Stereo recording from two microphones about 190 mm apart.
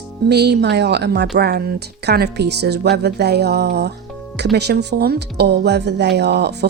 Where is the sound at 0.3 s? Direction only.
60° right (ahead or behind).